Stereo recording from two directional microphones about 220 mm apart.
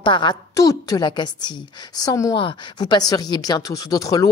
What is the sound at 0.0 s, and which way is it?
A woman's voice, 20° left (ahead or behind).